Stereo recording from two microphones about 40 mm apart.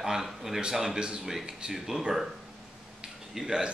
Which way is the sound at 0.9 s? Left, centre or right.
Right.